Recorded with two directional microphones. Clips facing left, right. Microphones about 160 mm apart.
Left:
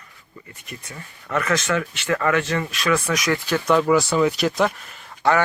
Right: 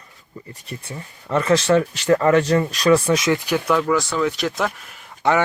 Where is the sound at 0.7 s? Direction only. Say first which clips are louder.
Right 4 dB; 30° right (ahead or behind).